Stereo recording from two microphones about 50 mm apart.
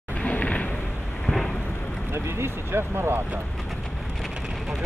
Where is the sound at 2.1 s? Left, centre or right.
Right.